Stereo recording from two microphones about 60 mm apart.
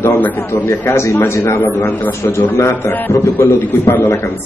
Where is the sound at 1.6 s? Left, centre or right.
Left.